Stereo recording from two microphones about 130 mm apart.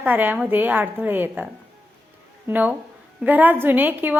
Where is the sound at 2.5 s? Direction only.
15° right (ahead or behind).